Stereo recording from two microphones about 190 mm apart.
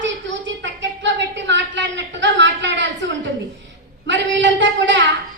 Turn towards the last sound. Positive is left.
turn(degrees=-75)  # may be behind; listen again after turning